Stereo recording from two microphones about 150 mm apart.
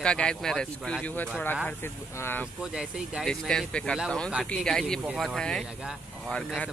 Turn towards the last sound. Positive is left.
turn(degrees=5)  # may be behind; listen again after turning